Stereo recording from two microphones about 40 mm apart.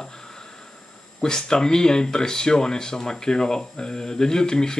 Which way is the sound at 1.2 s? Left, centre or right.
Centre.